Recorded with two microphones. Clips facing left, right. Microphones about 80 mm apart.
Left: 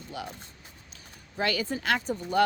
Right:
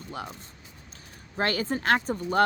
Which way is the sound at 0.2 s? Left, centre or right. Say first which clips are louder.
Right 1 dB; right.